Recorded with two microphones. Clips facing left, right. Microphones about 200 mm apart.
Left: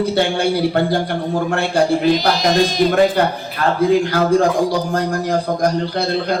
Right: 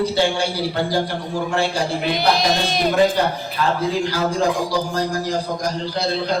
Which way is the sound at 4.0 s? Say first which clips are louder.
Left 5 dB; 55° left (ahead or behind).